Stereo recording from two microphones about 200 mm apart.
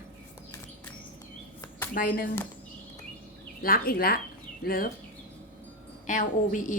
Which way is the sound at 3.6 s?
50° left (ahead or behind).